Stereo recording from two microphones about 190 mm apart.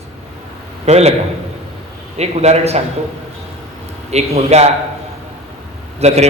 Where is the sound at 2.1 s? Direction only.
35° right (ahead or behind).